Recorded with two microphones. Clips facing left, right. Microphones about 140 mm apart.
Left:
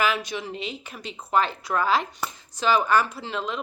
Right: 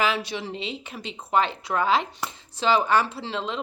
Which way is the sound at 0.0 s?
30° right (ahead or behind).